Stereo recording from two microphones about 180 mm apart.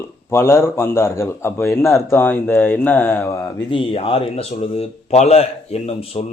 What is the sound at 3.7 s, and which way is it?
Speech, 30° left (ahead or behind).